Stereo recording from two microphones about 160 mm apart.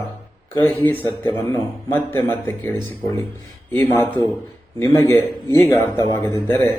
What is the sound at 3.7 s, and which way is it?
A man's voice, 15° left (ahead or behind).